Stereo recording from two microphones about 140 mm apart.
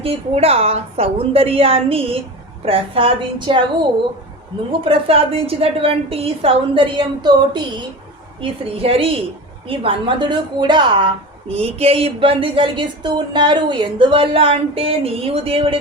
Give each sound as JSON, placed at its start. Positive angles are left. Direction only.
{"t": 0.0, "sound": "a woman's voice", "side_deg": -45}
{"t": 8.4, "sound": "a woman's voice", "side_deg": -45}